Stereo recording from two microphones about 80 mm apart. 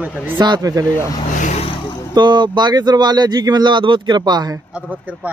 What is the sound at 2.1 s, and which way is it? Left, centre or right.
Speech, right.